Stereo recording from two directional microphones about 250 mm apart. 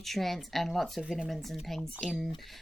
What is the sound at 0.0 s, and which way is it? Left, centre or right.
Speech, centre.